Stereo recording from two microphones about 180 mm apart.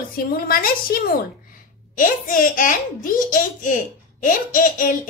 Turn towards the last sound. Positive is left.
turn(degrees=50)  # may be behind; listen again after turning